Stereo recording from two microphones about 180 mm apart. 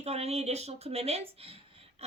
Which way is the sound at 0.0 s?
35° right (ahead or behind).